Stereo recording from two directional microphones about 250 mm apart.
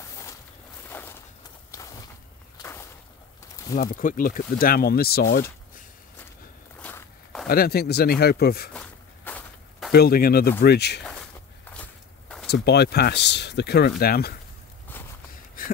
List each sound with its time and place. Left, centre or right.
0.0 s a sound: centre
1.7 s walk: centre
2.6 s a sound: centre
3.7 s speech: left
6.8 s walk: centre
7.4 s speech: left
8.7 s walk: centre
9.9 s speech: left
11.7 s walk: centre
12.4 s speech: left
15.6 s a sound: left